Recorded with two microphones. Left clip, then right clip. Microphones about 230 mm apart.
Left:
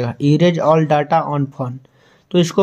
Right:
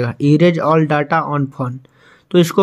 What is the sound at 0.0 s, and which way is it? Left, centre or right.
Speech, centre.